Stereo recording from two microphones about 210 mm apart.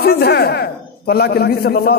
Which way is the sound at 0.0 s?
50° left (ahead or behind).